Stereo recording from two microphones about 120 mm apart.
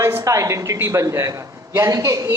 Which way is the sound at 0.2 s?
25° right (ahead or behind).